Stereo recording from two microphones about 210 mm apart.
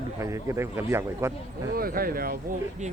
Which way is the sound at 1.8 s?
45° right (ahead or behind).